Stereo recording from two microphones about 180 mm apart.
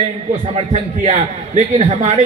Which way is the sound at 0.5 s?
35° right (ahead or behind).